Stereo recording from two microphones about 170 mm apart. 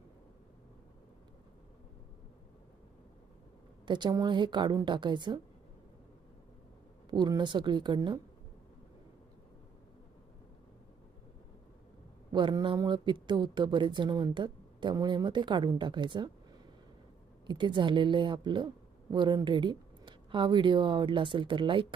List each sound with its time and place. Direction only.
3.8 s speech: 25° right (ahead or behind)
7.1 s speech: 25° right (ahead or behind)
12.3 s speech: 25° right (ahead or behind)
17.4 s speech: 25° right (ahead or behind)